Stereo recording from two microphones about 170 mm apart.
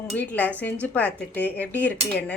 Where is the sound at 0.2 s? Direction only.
10° left (ahead or behind).